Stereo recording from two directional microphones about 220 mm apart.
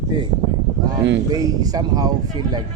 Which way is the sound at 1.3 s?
15° right (ahead or behind).